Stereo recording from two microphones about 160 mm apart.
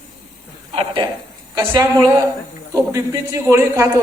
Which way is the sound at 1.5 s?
20° right (ahead or behind).